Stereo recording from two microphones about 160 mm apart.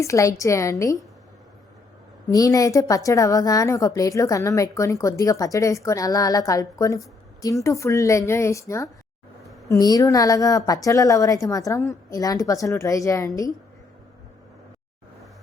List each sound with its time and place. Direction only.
0.0 s a woman's voice: 20° left (ahead or behind)
2.3 s a woman's voice: 20° left (ahead or behind)